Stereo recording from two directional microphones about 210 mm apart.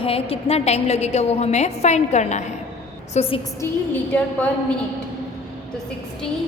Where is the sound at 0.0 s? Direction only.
25° left (ahead or behind).